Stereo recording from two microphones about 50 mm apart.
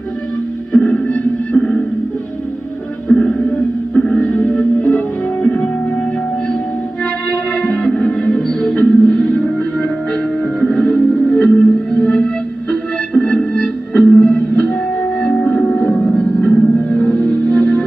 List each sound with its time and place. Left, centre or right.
0.7 s music: left
3.1 s music: centre
4.1 s music: left
7.6 s music: left